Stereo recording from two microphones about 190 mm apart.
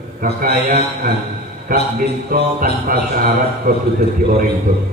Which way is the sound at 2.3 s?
50° right (ahead or behind).